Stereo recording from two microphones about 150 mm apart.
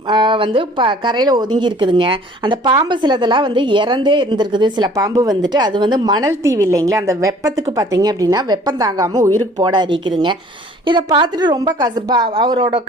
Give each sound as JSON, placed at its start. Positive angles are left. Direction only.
{"t": 0.1, "sound": "a woman's voice", "side_deg": -30}